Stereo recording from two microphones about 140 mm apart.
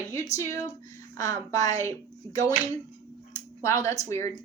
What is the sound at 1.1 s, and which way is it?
Speech, 20° left (ahead or behind).